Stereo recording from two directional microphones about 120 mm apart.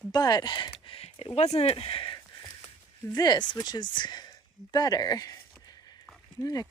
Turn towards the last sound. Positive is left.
turn(degrees=30)  # may be behind; listen again after turning